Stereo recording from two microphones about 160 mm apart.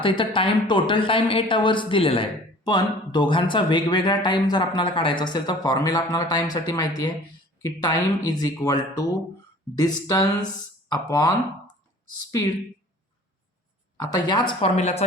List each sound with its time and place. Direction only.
0.0 s speech: 30° left (ahead or behind)
13.9 s speech: 30° left (ahead or behind)
14.8 s speech: 40° left (ahead or behind)